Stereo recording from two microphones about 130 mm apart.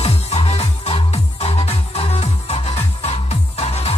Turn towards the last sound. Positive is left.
turn(degrees=55)  # may be behind; listen again after turning